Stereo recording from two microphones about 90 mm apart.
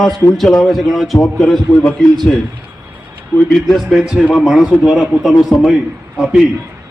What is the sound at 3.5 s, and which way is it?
A man's voice, centre (ahead or behind).